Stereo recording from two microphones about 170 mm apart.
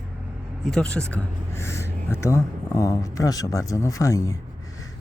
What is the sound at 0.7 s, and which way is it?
Speech, 5° left (ahead or behind).